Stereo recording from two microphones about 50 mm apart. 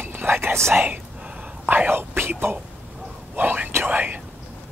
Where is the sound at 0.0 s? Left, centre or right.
Right.